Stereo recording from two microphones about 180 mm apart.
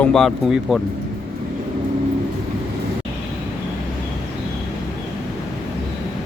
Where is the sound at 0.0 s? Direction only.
Centre (ahead or behind).